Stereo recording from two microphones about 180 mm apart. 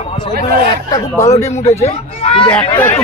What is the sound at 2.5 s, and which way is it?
Speech, 10° left (ahead or behind).